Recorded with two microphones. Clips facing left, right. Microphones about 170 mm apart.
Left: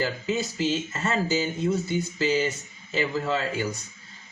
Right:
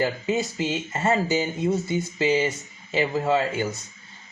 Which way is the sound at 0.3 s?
20° right (ahead or behind).